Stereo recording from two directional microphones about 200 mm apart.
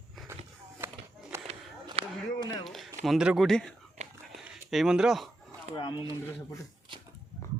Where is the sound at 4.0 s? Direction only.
35° right (ahead or behind).